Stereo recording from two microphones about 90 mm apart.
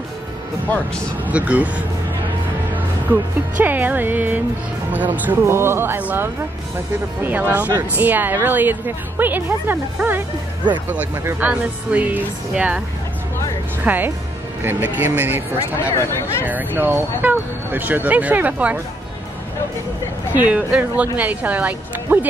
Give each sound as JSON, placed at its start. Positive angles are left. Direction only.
{"t": 0.7, "sound": "speech", "side_deg": 15}
{"t": 1.2, "sound": "speech", "side_deg": -15}
{"t": 3.1, "sound": "speech", "side_deg": -20}
{"t": 7.2, "sound": "speech", "side_deg": -20}
{"t": 11.3, "sound": "speech", "side_deg": -15}
{"t": 13.8, "sound": "speech", "side_deg": -20}
{"t": 15.8, "sound": "speech", "side_deg": 30}
{"t": 16.4, "sound": "speech", "side_deg": -20}
{"t": 20.3, "sound": "speech", "side_deg": -15}